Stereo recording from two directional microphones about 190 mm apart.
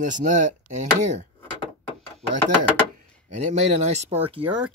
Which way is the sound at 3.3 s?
35° right (ahead or behind).